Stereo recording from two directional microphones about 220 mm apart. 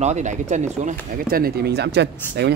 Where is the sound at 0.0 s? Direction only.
30° right (ahead or behind).